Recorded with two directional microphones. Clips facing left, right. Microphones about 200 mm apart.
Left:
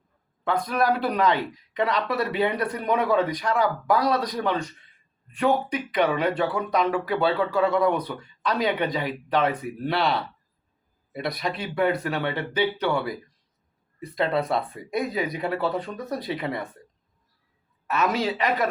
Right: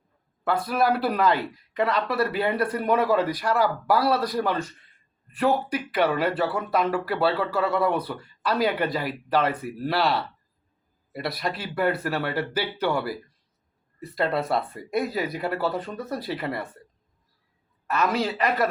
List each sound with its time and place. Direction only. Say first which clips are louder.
0.4 s speech: even; 5° right (ahead or behind)
17.8 s speech: even; centre (ahead or behind)